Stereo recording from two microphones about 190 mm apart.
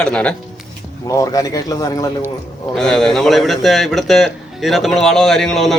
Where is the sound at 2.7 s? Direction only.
5° left (ahead or behind).